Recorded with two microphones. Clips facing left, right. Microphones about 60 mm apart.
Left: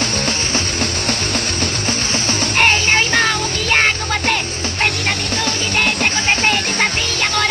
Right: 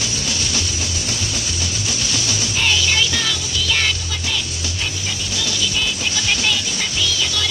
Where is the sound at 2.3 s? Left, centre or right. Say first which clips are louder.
Left 7 dB; left.